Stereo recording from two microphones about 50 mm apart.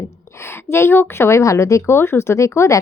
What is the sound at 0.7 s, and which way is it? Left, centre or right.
Speech, left.